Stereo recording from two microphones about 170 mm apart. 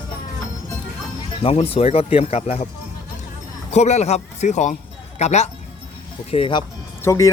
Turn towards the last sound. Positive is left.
turn(degrees=20)  # may be behind; listen again after turning